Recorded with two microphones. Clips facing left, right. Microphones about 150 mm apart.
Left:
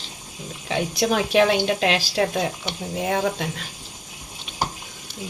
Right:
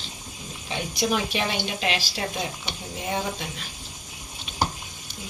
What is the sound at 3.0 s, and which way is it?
Speech, 90° left.